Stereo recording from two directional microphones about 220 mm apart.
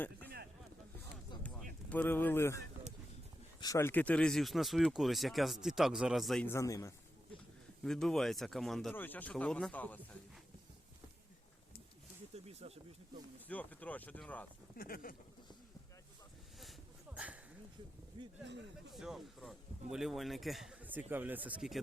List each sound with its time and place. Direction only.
1.9 s speech: 10° left (ahead or behind)
3.6 s speech: 15° left (ahead or behind)
7.9 s speech: centre (ahead or behind)
12.3 s speech: 30° right (ahead or behind)
13.5 s speech: 5° left (ahead or behind)
14.8 s speech: 40° left (ahead or behind)
17.2 s a sound: 5° right (ahead or behind)
18.2 s speech: 20° right (ahead or behind)
18.9 s speech: centre (ahead or behind)